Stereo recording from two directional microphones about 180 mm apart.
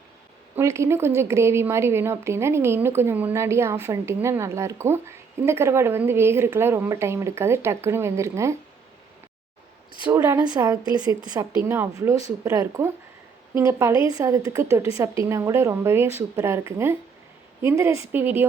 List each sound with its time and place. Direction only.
0.5 s a woman's voice: 15° right (ahead or behind)
10.0 s a woman's voice: 10° right (ahead or behind)